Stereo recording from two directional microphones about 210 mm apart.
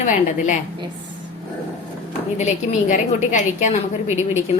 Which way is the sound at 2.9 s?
35° left (ahead or behind).